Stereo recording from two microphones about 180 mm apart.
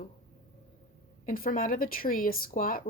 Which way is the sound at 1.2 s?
50° left (ahead or behind).